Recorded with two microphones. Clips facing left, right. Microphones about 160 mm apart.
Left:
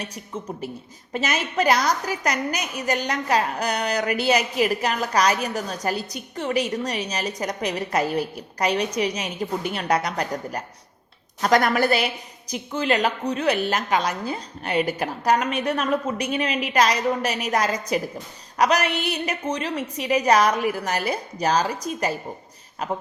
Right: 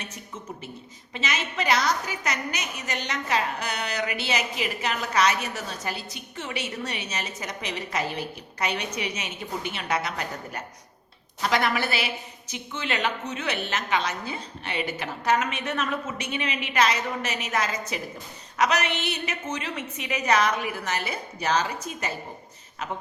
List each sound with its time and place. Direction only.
1.1 s a woman's voice: 45° left (ahead or behind)